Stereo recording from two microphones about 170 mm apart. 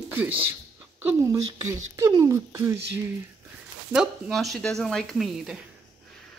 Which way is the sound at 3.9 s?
Centre (ahead or behind).